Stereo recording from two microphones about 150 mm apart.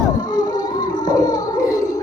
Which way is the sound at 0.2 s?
25° left (ahead or behind).